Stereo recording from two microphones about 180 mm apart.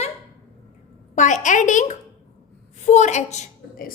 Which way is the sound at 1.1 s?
45° left (ahead or behind).